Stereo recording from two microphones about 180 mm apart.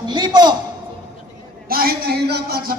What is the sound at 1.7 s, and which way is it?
Speech, 55° right (ahead or behind).